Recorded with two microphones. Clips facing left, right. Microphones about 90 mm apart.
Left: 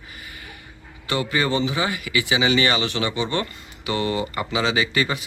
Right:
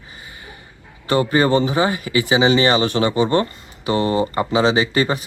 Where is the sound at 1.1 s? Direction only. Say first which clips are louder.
Right 7 dB; 35° right (ahead or behind).